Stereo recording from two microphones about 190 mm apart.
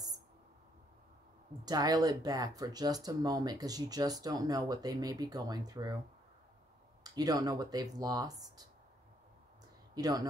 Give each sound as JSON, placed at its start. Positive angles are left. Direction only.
{"t": 1.6, "sound": "speech", "side_deg": -20}
{"t": 7.0, "sound": "speech", "side_deg": -20}
{"t": 9.9, "sound": "speech", "side_deg": -20}